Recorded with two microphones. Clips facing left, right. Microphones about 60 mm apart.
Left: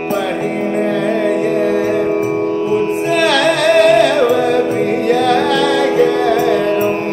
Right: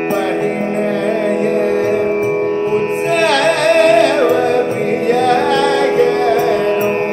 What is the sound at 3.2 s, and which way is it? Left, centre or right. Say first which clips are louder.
Music: even; centre.